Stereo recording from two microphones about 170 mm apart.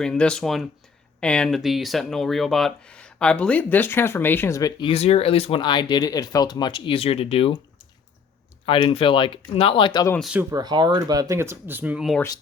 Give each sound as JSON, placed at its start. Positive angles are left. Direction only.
{"t": 0.0, "sound": "speech", "side_deg": 5}
{"t": 4.9, "sound": "speech", "side_deg": 35}
{"t": 8.6, "sound": "speech", "side_deg": 30}
{"t": 10.2, "sound": "speech", "side_deg": 0}
{"t": 10.5, "sound": "speech", "side_deg": -25}